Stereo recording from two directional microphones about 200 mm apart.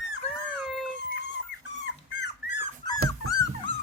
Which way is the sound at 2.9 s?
20° left (ahead or behind).